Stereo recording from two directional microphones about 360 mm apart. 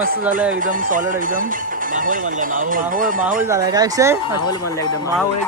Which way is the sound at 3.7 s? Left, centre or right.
Centre.